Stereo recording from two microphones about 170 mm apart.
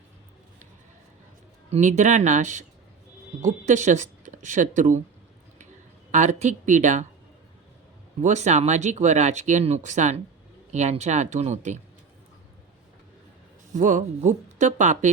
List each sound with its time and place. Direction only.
1.7 s speech: 45° right (ahead or behind)
6.1 s speech: 45° right (ahead or behind)
8.2 s speech: 45° right (ahead or behind)
13.7 s speech: 45° right (ahead or behind)